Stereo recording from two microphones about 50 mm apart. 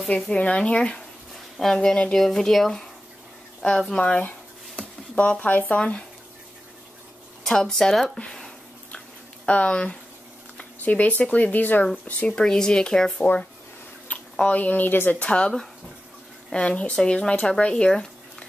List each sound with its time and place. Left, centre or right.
0.1 s speech: left
1.6 s speech: centre
2.1 s speech: centre
3.9 s speech: left
5.8 s speech: centre
7.4 s speech: centre
9.5 s speech: left
11.9 s speech: left
14.1 s a sound: left
14.5 s speech: left
15.1 s speech: left
16.5 s speech: left